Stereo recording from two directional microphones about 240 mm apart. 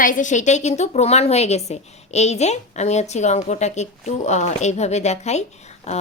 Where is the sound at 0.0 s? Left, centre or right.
Left.